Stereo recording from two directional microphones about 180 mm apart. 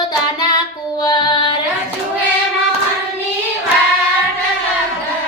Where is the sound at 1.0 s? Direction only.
25° left (ahead or behind).